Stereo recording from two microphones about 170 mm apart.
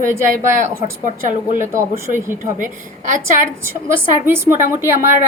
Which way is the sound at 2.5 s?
50° right (ahead or behind).